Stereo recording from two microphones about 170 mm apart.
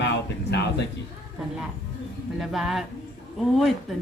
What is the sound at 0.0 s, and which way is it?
Speech, 85° left.